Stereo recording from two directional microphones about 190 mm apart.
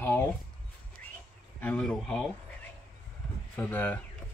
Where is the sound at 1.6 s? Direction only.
5° left (ahead or behind).